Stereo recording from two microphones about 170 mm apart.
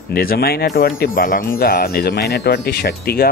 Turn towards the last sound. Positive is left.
turn(degrees=65)  # may be behind; listen again after turning